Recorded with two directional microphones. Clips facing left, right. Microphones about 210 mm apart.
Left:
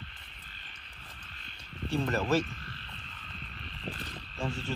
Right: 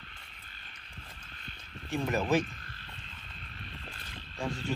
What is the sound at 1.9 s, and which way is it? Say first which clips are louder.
Speech: even; 15° right (ahead or behind).